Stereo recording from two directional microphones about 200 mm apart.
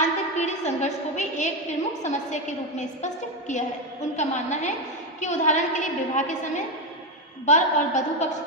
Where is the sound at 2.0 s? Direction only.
35° left (ahead or behind).